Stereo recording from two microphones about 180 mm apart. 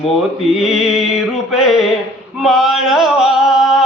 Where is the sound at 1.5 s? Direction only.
Centre (ahead or behind).